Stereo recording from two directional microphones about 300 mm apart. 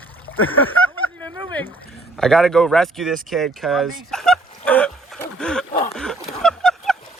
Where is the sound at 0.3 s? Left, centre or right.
Left.